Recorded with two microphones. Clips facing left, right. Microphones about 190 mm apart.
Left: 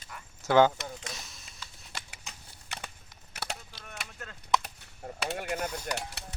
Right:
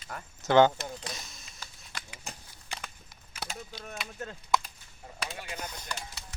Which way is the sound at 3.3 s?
70° left (ahead or behind).